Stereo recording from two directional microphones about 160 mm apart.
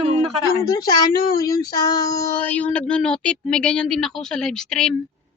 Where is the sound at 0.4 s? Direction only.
20° left (ahead or behind).